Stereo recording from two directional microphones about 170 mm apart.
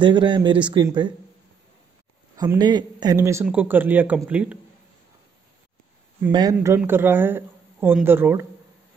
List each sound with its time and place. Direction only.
0.0 s speech: 30° right (ahead or behind)
2.3 s speech: 20° right (ahead or behind)
6.3 s speech: 20° right (ahead or behind)